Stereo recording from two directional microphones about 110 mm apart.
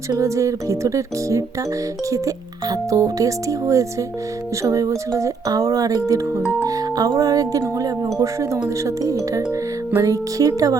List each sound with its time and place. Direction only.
0.1 s music: 30° right (ahead or behind)
2.0 s speech: 30° right (ahead or behind)
7.8 s music: 30° right (ahead or behind)
8.6 s speech: 30° right (ahead or behind)